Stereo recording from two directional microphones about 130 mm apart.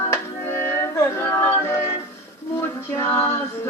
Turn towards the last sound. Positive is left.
turn(degrees=20)  # may be behind; listen again after turning